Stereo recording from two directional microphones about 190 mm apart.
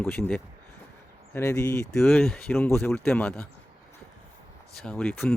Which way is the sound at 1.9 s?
Centre (ahead or behind).